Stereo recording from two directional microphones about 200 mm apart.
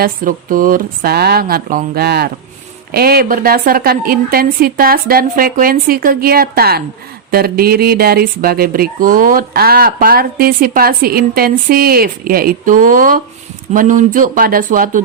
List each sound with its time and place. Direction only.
0.0 s speech: 45° right (ahead or behind)